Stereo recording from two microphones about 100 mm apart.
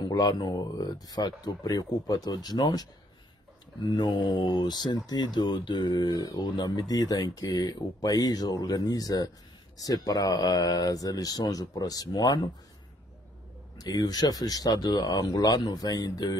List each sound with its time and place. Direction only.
0.1 s speech: 45° left (ahead or behind)
13.7 s speech: 40° left (ahead or behind)